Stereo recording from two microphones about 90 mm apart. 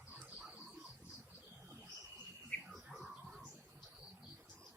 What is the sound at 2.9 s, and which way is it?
Music, centre (ahead or behind).